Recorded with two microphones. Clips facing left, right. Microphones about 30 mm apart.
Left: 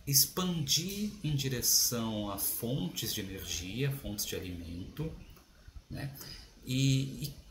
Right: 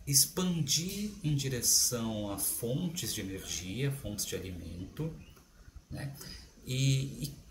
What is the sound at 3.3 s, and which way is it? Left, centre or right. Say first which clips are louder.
Speech: even; centre.